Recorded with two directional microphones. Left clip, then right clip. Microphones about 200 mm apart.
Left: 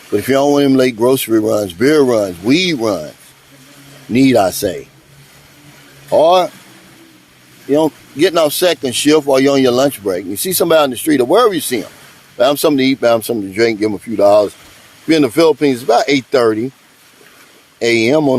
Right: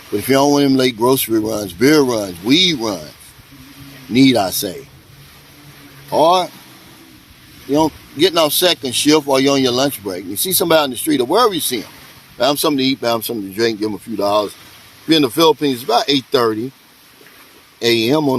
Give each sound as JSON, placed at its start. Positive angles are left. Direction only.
{"t": 0.1, "sound": "speech", "side_deg": 40}
{"t": 4.1, "sound": "speech", "side_deg": 40}
{"t": 6.1, "sound": "speech", "side_deg": 45}
{"t": 7.7, "sound": "speech", "side_deg": 40}
{"t": 17.7, "sound": "speech", "side_deg": 45}